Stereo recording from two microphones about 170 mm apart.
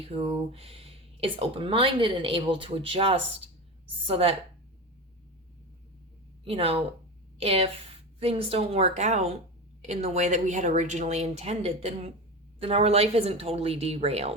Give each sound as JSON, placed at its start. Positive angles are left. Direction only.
{"t": 0.0, "sound": "speech", "side_deg": -35}
{"t": 6.4, "sound": "a woman's voice", "side_deg": -35}